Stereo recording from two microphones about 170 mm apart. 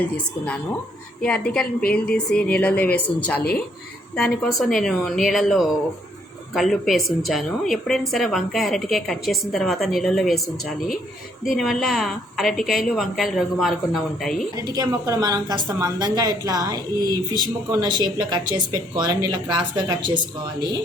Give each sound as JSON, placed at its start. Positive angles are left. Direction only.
{"t": 1.2, "sound": "a woman's voice", "side_deg": 5}
{"t": 11.4, "sound": "a woman's voice", "side_deg": 0}
{"t": 14.5, "sound": "speech", "side_deg": -20}